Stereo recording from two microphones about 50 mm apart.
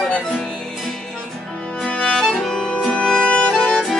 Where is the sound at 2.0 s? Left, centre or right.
Centre.